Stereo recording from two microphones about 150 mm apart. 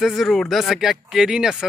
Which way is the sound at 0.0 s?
Centre (ahead or behind).